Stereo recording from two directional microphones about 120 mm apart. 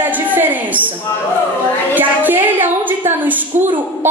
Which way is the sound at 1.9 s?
15° right (ahead or behind).